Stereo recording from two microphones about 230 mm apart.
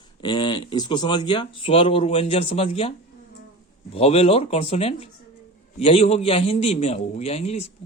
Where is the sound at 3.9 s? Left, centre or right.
Left.